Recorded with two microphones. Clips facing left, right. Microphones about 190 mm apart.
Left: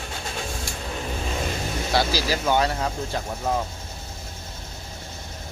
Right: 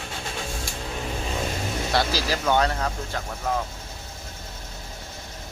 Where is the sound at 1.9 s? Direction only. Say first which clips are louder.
Left 2 dB; centre (ahead or behind).